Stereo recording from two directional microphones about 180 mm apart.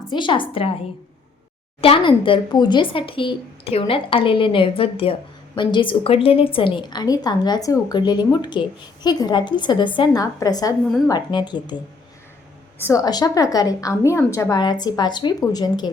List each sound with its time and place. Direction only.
0.1 s speech: 25° left (ahead or behind)
1.8 s speech: 30° left (ahead or behind)
12.8 s speech: 20° left (ahead or behind)